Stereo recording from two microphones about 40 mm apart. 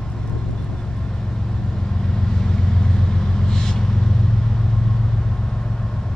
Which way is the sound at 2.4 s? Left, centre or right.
Centre.